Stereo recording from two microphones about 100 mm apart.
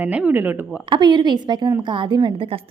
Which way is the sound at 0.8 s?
50° right (ahead or behind).